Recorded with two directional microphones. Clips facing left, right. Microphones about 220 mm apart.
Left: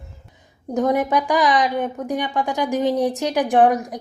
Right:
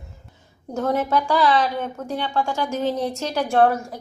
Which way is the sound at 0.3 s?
15° left (ahead or behind).